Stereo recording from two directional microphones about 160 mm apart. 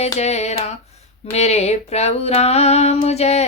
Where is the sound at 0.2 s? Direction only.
45° left (ahead or behind).